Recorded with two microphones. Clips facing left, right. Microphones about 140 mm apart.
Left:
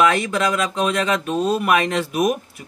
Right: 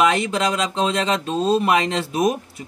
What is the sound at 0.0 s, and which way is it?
Speech, 20° right (ahead or behind).